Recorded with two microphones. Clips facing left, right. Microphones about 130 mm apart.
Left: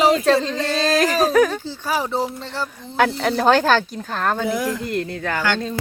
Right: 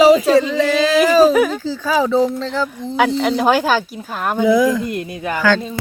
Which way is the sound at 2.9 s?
5° right (ahead or behind).